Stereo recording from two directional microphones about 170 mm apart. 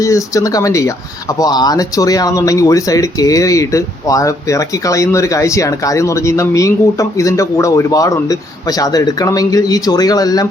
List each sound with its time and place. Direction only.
0.0 s speech: 20° left (ahead or behind)